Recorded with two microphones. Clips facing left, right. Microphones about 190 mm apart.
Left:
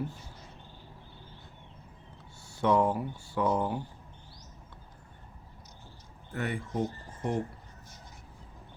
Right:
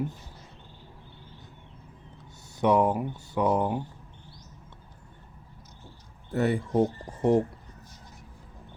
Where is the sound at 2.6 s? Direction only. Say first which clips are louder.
Right 3 dB; 20° right (ahead or behind).